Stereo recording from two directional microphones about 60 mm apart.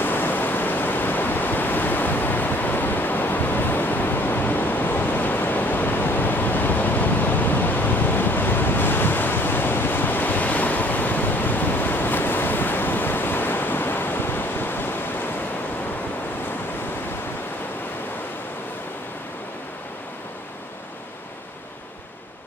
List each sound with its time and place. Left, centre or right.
0.0 s waves: left